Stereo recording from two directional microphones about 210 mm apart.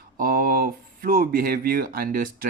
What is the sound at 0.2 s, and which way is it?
Speech, 45° right (ahead or behind).